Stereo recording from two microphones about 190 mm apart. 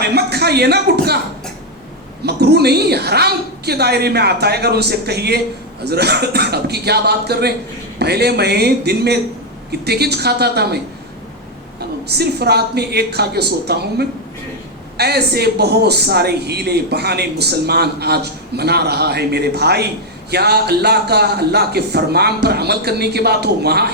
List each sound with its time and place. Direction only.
0.0 s speech: 60° right (ahead or behind)
2.2 s a man's voice: 60° right (ahead or behind)
12.0 s a man's voice: 60° right (ahead or behind)